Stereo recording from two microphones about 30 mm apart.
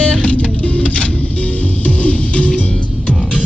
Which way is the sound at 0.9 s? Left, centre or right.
Left.